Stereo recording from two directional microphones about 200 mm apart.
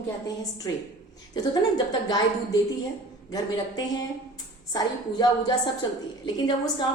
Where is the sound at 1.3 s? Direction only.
20° left (ahead or behind).